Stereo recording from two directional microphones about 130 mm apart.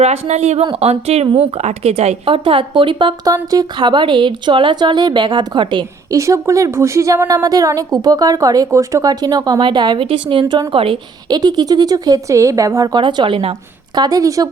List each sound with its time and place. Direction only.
0.0 s speech: 55° right (ahead or behind); by 6.1 s 35° right (ahead or behind)
6.1 s a woman's voice: 25° right (ahead or behind); by 10.4 s 45° right (ahead or behind)
10.4 s a woman's voice: 25° right (ahead or behind)
10.7 s speech: 45° right (ahead or behind)
11.3 s speech: 30° right (ahead or behind)
13.9 s a woman's voice: 30° right (ahead or behind)